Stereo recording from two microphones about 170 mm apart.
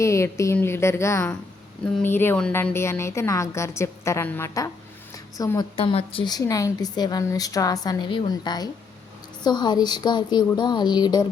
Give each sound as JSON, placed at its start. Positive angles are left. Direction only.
{"t": 0.0, "sound": "a woman's voice", "side_deg": 15}
{"t": 5.7, "sound": "a woman's voice", "side_deg": 35}